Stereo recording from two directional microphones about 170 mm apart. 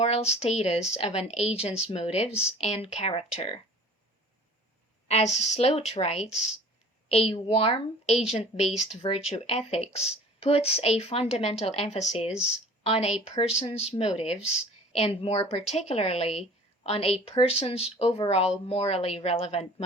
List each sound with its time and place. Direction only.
0.0 s speech: 35° left (ahead or behind)
5.0 s speech: 40° left (ahead or behind)